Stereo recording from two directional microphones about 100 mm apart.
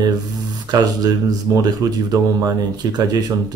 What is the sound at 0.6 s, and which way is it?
Speech, 45° right (ahead or behind).